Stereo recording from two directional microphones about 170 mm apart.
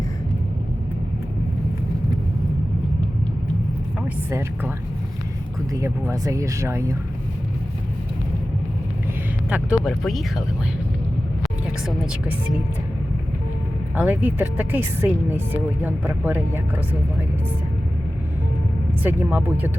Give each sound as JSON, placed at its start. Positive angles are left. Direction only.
{"t": 4.3, "sound": "speech", "side_deg": -15}
{"t": 5.7, "sound": "speech", "side_deg": -20}
{"t": 9.5, "sound": "speech", "side_deg": -5}
{"t": 13.9, "sound": "speech", "side_deg": -10}
{"t": 19.0, "sound": "speech", "side_deg": -10}